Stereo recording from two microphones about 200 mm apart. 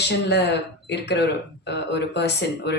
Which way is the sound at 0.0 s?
55° left (ahead or behind).